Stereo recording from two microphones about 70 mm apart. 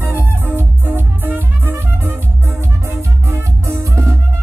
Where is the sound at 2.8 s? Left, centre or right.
Right.